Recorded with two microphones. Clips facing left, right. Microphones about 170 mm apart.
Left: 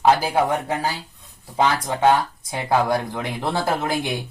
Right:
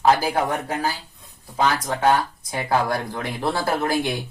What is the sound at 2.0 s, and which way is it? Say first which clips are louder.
Speech: left 3 dB; 20° left (ahead or behind).